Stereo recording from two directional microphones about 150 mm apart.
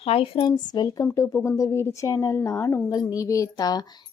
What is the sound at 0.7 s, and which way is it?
A woman's voice, 25° left (ahead or behind).